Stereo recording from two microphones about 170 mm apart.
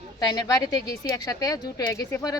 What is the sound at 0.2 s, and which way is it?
Speech, 20° left (ahead or behind).